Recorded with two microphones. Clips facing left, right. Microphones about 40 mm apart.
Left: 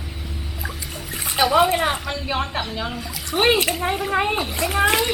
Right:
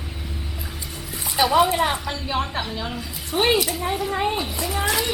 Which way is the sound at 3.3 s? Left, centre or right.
Left.